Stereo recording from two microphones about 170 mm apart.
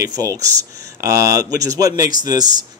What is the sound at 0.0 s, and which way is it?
Speech, 20° right (ahead or behind).